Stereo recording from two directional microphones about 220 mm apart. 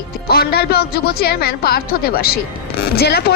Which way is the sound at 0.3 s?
45° left (ahead or behind).